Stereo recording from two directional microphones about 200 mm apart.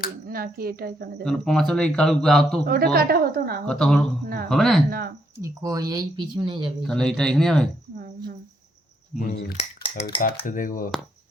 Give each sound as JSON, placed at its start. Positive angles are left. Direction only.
{"t": 0.3, "sound": "a woman's voice", "side_deg": -50}
{"t": 1.2, "sound": "a man's voice", "side_deg": 0}
{"t": 2.6, "sound": "a woman's voice", "side_deg": -50}
{"t": 3.7, "sound": "a man's voice", "side_deg": 5}
{"t": 4.9, "sound": "a woman's voice", "side_deg": -50}
{"t": 5.4, "sound": "speech", "side_deg": -15}
{"t": 6.8, "sound": "a man's voice", "side_deg": 0}
{"t": 9.1, "sound": "speech", "side_deg": 35}
{"t": 10.4, "sound": "cutlery", "side_deg": 40}